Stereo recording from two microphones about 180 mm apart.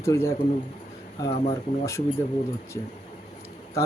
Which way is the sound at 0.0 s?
15° left (ahead or behind).